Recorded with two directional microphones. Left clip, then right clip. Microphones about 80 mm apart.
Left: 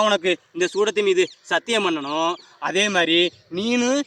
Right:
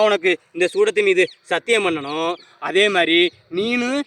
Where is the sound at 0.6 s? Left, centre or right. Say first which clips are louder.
Right 4 dB; centre.